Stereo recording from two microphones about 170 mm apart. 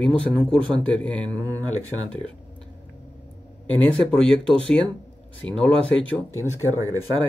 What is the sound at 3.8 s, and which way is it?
Speech, 5° left (ahead or behind).